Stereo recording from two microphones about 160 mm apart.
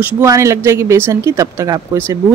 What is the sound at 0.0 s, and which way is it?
Speech, 20° right (ahead or behind).